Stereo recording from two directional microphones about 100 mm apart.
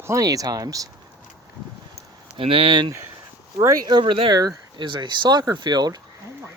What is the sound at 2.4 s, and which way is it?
Speech, 70° right (ahead or behind).